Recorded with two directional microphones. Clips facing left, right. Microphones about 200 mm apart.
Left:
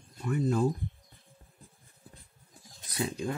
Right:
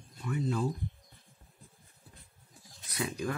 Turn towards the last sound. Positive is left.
turn(degrees=30)  # may be behind; listen again after turning